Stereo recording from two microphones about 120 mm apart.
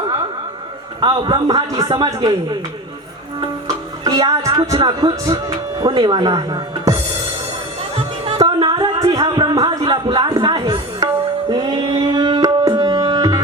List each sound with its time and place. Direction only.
1.0 s speech: 35° right (ahead or behind)
4.0 s speech: 30° right (ahead or behind)
7.9 s music: 50° right (ahead or behind)
8.5 s a sound: 40° right (ahead or behind)
9.0 s music: 30° right (ahead or behind)
9.2 s a sound: 35° right (ahead or behind)
9.9 s music: 35° right (ahead or behind)